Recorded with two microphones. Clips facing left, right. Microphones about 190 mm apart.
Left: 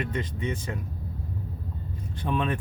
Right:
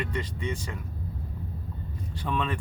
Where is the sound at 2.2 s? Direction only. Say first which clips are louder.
Left 2 dB; 20° left (ahead or behind).